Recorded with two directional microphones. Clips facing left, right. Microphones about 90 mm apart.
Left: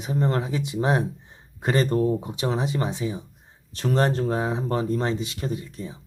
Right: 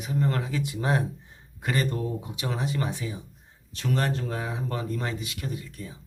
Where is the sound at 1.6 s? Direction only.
30° left (ahead or behind).